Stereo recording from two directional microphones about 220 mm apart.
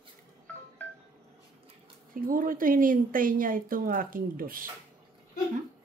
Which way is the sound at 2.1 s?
40° right (ahead or behind).